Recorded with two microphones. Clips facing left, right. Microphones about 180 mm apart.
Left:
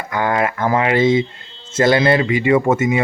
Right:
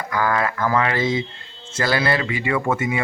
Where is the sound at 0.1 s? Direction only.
25° left (ahead or behind).